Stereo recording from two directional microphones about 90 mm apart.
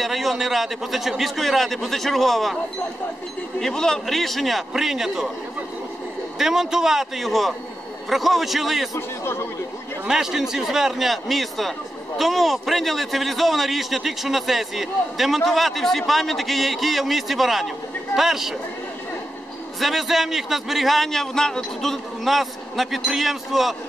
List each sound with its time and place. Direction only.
0.0 s a man's voice: centre (ahead or behind)
3.5 s a man's voice: 5° left (ahead or behind)
6.3 s a man's voice: 5° right (ahead or behind)
8.9 s a man's voice: 30° left (ahead or behind)
10.0 s a man's voice: 5° right (ahead or behind)
19.8 s a man's voice: centre (ahead or behind)